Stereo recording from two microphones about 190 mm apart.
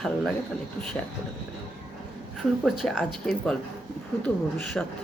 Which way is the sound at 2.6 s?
5° right (ahead or behind).